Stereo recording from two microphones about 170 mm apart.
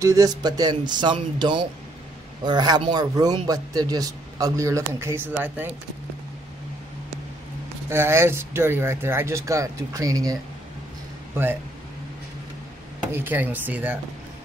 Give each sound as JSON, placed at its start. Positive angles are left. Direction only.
{"t": 0.0, "sound": "a man's voice", "side_deg": -20}
{"t": 7.9, "sound": "speech", "side_deg": -15}
{"t": 13.1, "sound": "speech", "side_deg": -10}